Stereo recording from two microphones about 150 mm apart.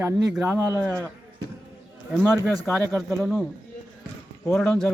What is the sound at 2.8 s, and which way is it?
Speech, 20° right (ahead or behind).